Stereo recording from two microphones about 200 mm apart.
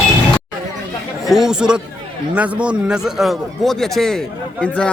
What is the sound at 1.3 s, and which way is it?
A man's voice, centre (ahead or behind).